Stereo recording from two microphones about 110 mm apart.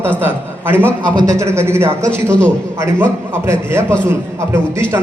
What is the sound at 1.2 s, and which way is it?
A man's voice, 30° right (ahead or behind).